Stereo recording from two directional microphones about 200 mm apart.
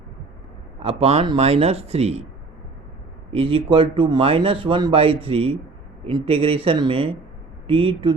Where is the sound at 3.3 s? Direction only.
25° right (ahead or behind).